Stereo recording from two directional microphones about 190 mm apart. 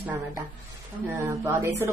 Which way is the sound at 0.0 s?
10° right (ahead or behind).